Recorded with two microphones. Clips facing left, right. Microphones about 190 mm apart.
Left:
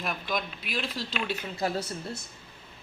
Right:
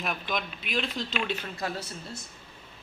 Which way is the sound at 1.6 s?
30° left (ahead or behind).